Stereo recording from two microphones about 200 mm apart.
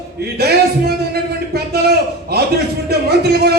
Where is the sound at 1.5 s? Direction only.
50° right (ahead or behind).